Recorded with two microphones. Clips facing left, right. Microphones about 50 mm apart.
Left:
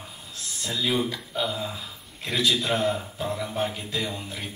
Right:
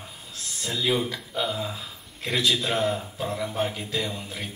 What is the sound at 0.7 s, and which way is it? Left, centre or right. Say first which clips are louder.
Music: even; centre.